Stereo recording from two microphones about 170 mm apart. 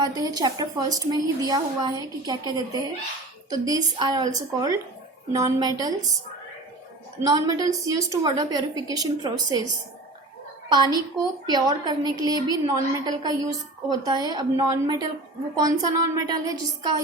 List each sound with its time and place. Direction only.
0.0 s a woman's voice: 25° right (ahead or behind)
7.3 s a woman's voice: 20° right (ahead or behind)
10.7 s a woman's voice: 25° right (ahead or behind)